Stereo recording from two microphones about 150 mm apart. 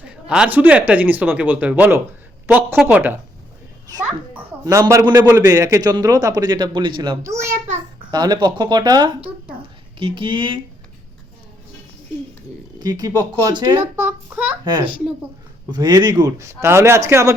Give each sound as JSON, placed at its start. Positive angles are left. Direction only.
{"t": 0.3, "sound": "speech", "side_deg": -10}
{"t": 4.6, "sound": "a man's voice", "side_deg": -20}
{"t": 12.8, "sound": "a man's voice", "side_deg": -25}
{"t": 13.7, "sound": "speech", "side_deg": -15}
{"t": 15.7, "sound": "a man's voice", "side_deg": -25}